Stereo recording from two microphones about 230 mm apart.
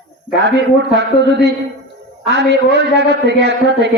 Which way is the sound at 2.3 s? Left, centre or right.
Right.